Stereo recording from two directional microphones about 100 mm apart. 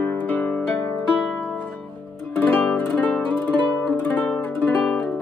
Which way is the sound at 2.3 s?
15° left (ahead or behind).